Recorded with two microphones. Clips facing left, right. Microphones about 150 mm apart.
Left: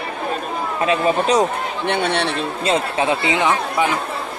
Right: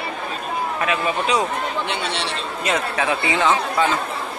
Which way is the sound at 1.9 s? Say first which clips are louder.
Left 6 dB; 55° left (ahead or behind).